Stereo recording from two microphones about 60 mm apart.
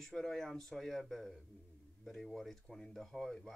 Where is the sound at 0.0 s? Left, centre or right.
Centre.